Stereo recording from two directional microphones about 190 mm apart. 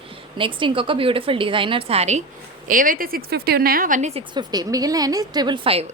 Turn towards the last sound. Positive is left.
turn(degrees=-30)  # may be behind; listen again after turning